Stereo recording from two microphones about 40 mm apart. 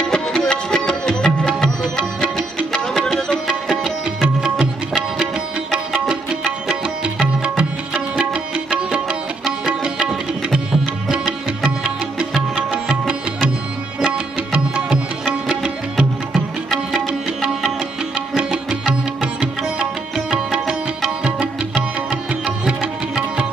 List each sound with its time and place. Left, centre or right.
0.0 s music: centre
3.1 s music: centre
3.7 s music: right